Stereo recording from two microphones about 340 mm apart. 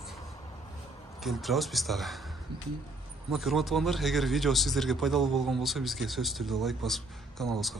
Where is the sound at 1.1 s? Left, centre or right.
Centre.